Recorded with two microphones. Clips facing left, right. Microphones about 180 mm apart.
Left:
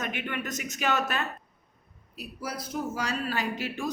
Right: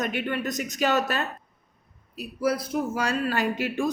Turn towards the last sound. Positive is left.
turn(degrees=-50)  # may be behind; listen again after turning